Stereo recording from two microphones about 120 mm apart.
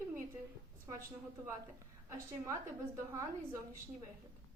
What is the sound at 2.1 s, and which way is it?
A woman's voice, 25° right (ahead or behind).